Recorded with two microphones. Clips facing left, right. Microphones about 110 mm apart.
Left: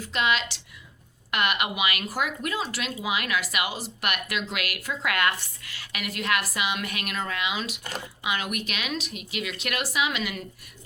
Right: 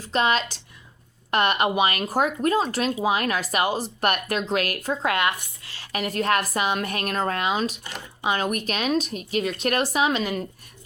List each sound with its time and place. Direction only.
0.0 s a woman's voice: 35° right (ahead or behind)
5.1 s speech: 25° right (ahead or behind)
5.7 s a woman's voice: 35° right (ahead or behind)